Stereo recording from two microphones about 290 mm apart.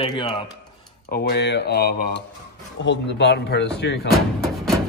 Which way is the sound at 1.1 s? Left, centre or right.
Left.